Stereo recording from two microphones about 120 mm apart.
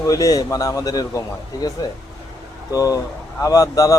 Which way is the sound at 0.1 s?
30° left (ahead or behind).